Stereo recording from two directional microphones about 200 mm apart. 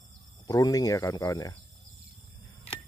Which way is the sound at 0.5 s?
20° left (ahead or behind).